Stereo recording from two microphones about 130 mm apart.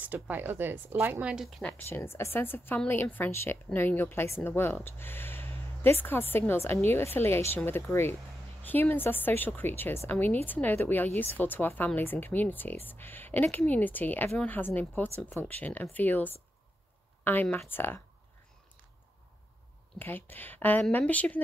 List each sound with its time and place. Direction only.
0.0 s speech: 15° right (ahead or behind)
1.6 s a woman's voice: 10° left (ahead or behind)
20.0 s a woman's voice: 15° left (ahead or behind)